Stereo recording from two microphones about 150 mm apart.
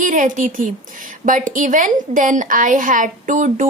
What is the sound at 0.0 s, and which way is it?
A woman's voice, 60° right (ahead or behind).